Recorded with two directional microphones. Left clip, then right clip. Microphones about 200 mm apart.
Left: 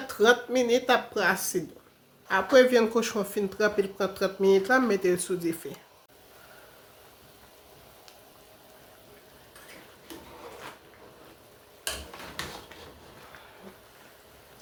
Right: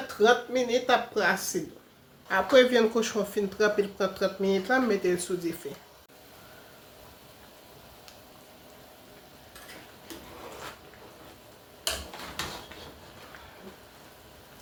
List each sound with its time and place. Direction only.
0.1 s speech: 40° left (ahead or behind)
2.2 s speech: 20° left (ahead or behind)